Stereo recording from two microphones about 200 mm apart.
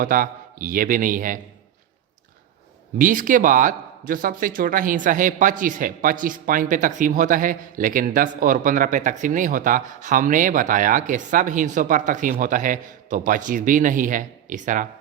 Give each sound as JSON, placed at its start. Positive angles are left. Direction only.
{"t": 0.0, "sound": "a man's voice", "side_deg": -45}
{"t": 3.0, "sound": "speech", "side_deg": -40}